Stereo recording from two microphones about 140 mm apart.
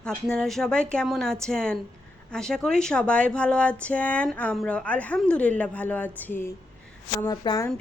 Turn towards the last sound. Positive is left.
turn(degrees=25)  # may be behind; listen again after turning